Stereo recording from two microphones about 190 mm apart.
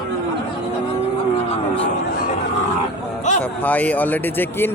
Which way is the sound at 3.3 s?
40° left (ahead or behind).